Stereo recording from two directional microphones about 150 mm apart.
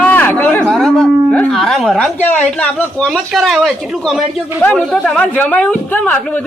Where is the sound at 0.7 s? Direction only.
Centre (ahead or behind).